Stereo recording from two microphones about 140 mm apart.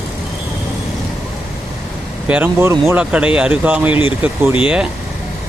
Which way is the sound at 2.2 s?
10° right (ahead or behind).